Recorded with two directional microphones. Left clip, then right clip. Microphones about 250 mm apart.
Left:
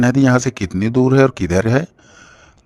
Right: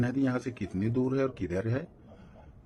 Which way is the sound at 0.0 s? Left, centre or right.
Left.